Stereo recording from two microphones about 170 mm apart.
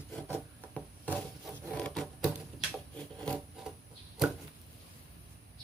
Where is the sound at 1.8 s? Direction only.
Centre (ahead or behind).